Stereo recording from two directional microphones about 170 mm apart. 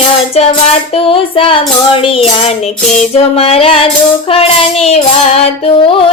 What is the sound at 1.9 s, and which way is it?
Music, 30° left (ahead or behind).